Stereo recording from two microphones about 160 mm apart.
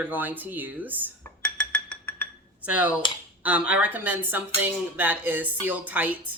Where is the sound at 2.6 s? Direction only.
10° right (ahead or behind).